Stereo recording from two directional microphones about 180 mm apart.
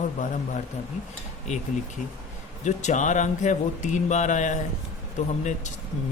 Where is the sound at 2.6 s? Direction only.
40° left (ahead or behind).